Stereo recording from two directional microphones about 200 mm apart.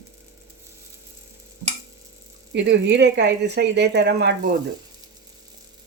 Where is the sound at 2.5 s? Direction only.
60° right (ahead or behind).